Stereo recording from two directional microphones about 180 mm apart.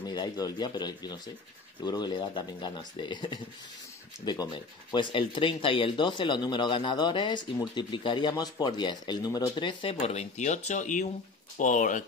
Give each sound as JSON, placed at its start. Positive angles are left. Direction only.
{"t": 0.0, "sound": "speech", "side_deg": 20}